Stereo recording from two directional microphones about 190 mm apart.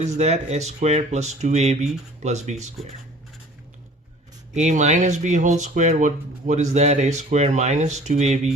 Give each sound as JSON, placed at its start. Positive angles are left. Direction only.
{"t": 0.0, "sound": "speech", "side_deg": -35}
{"t": 4.5, "sound": "speech", "side_deg": -40}